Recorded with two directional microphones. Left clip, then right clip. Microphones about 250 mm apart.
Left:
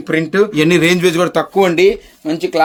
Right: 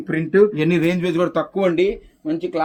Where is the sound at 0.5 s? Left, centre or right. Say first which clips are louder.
Left 7 dB; left.